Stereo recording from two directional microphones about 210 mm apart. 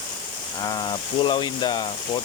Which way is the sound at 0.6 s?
20° left (ahead or behind).